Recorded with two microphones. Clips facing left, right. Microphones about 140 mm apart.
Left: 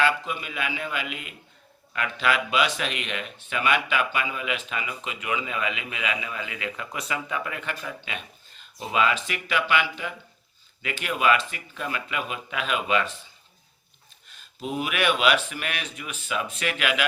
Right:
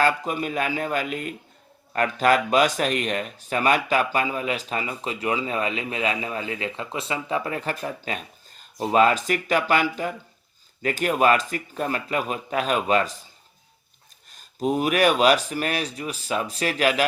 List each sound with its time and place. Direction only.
0.0 s a man's voice: 40° right (ahead or behind)
14.3 s speech: 40° right (ahead or behind)